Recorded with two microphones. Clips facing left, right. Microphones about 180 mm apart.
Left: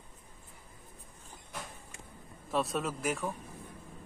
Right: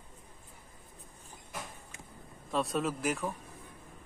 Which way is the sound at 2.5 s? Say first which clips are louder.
Right 1 dB; centre (ahead or behind).